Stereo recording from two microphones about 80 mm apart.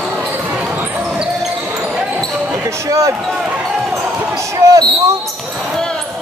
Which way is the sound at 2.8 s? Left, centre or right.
Right.